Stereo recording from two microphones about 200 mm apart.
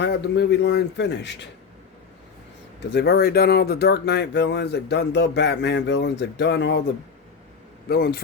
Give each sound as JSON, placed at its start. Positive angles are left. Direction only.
{"t": 0.0, "sound": "speech", "side_deg": 60}
{"t": 2.9, "sound": "speech", "side_deg": 55}
{"t": 7.9, "sound": "a man's voice", "side_deg": 50}